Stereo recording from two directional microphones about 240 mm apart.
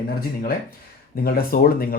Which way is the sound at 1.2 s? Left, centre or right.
Left.